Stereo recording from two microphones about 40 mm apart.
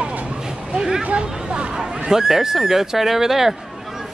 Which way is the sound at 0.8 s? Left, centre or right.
Centre.